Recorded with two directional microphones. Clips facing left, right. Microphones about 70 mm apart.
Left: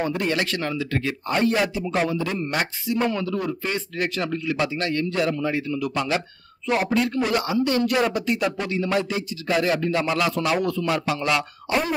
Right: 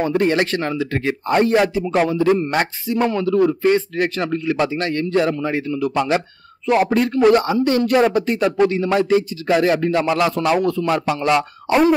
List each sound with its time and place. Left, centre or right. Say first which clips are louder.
0.0 s speech: right 7 dB; right